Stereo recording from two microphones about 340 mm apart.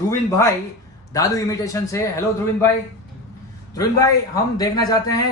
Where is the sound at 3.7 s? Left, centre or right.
Centre.